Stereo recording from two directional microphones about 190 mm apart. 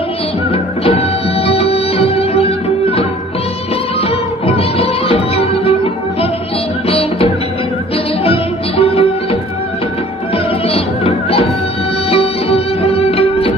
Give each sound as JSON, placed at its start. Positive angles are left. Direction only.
{"t": 0.5, "sound": "music", "side_deg": 30}
{"t": 8.8, "sound": "music", "side_deg": 30}